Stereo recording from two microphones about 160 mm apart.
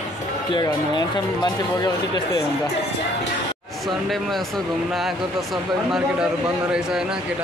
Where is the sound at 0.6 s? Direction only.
25° left (ahead or behind).